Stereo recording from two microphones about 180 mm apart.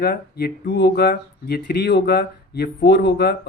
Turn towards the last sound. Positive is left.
turn(degrees=65)  # may be behind; listen again after turning